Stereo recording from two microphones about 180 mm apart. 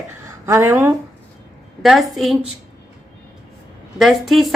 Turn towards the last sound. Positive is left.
turn(degrees=0)  # may be behind; listen again after turning